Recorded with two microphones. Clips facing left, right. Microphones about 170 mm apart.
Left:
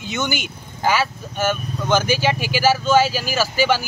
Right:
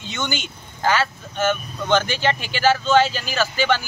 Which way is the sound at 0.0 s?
10° left (ahead or behind).